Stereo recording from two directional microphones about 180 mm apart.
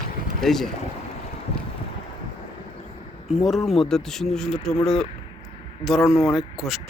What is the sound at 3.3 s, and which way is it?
A man's voice, centre (ahead or behind).